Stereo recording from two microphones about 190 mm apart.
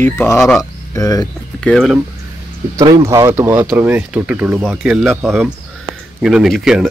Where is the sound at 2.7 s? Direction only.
15° right (ahead or behind).